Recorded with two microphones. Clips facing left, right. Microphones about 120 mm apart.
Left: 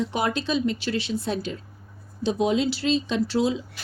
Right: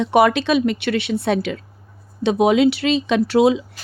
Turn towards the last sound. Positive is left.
turn(degrees=-75)  # may be behind; listen again after turning